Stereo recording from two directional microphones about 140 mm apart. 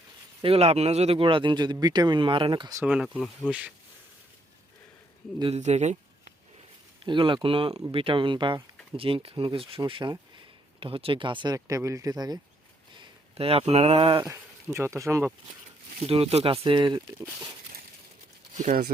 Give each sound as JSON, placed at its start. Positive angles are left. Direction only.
{"t": 0.4, "sound": "speech", "side_deg": -45}
{"t": 2.8, "sound": "speech", "side_deg": -5}
{"t": 3.4, "sound": "speech", "side_deg": 10}
{"t": 5.5, "sound": "speech", "side_deg": -55}
{"t": 7.0, "sound": "speech", "side_deg": -35}
{"t": 13.3, "sound": "speech", "side_deg": -45}
{"t": 14.3, "sound": "speech", "side_deg": -20}
{"t": 16.0, "sound": "speech", "side_deg": -45}
{"t": 18.5, "sound": "speech", "side_deg": -55}